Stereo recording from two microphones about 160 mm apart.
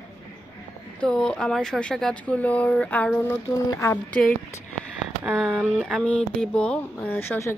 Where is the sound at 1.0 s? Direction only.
5° left (ahead or behind).